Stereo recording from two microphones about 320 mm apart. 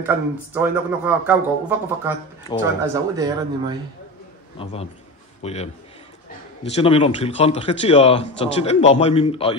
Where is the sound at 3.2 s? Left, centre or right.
Centre.